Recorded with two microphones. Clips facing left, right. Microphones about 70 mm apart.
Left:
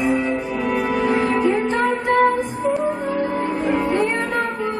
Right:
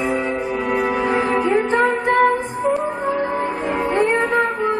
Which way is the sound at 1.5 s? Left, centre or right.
Right.